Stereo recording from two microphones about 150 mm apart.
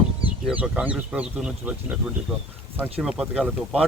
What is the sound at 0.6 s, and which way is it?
Speech, 10° right (ahead or behind).